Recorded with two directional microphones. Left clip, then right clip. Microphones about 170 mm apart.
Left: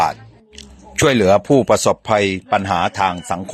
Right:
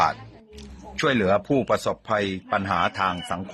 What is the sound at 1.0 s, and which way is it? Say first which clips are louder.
Speech: left 8 dB; 30° left (ahead or behind).